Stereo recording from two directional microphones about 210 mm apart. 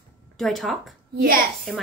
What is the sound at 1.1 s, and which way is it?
Speech, 45° right (ahead or behind).